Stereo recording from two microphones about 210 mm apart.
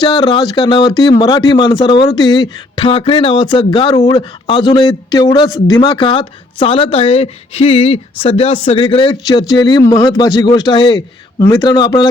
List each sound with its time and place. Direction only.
0.1 s speech: 20° left (ahead or behind)